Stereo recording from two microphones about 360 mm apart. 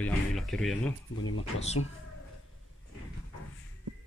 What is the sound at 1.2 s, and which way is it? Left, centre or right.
Speech, left.